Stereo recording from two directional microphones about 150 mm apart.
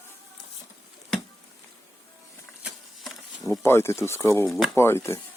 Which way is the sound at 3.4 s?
15° left (ahead or behind).